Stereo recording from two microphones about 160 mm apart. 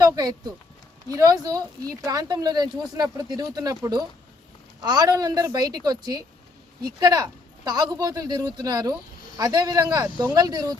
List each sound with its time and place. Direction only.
0.0 s speech: 25° right (ahead or behind)
4.8 s speech: 25° right (ahead or behind)